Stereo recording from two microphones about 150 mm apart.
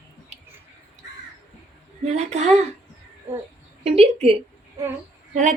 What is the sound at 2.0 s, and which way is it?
Speech, 50° right (ahead or behind).